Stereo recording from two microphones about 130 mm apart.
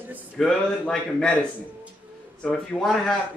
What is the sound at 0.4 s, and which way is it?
Speech, 5° left (ahead or behind).